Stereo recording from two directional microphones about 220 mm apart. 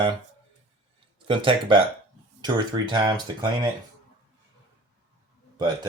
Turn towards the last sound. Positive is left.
turn(degrees=-20)  # may be behind; listen again after turning